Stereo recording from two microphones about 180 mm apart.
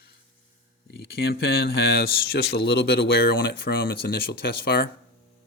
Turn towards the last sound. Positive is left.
turn(degrees=60)  # may be behind; listen again after turning